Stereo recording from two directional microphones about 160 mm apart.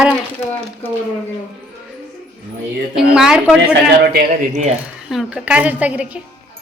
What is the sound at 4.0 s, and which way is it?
Speech, 85° right.